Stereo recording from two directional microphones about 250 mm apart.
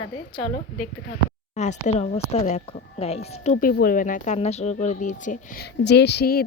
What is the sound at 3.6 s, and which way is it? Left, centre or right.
Speech, left.